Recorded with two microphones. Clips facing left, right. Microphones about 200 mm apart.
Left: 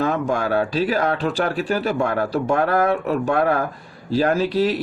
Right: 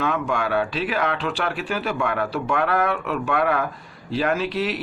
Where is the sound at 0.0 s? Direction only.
40° left (ahead or behind).